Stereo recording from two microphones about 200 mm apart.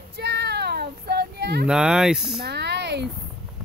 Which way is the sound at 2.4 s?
55° right (ahead or behind).